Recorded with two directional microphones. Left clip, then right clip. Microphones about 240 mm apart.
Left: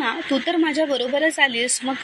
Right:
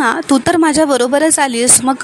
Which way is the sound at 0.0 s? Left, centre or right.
Right.